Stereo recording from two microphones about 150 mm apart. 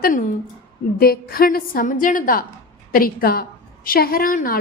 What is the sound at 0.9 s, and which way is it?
A woman's voice, 80° left.